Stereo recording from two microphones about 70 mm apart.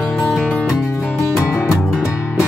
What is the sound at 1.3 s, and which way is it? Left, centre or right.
Music, centre.